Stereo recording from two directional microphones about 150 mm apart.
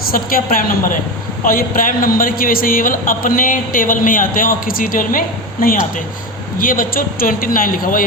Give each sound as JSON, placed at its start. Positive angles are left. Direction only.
{"t": 0.1, "sound": "a woman's voice", "side_deg": 70}